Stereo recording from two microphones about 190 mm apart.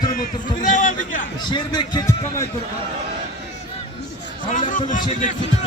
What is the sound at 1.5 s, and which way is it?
Speech, 25° left (ahead or behind).